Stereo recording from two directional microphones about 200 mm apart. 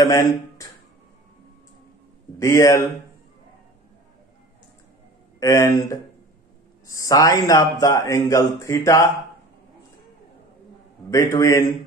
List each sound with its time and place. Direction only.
0.0 s speech: 15° left (ahead or behind)
2.3 s speech: 15° left (ahead or behind)
5.4 s speech: 15° left (ahead or behind)
11.1 s speech: 15° left (ahead or behind)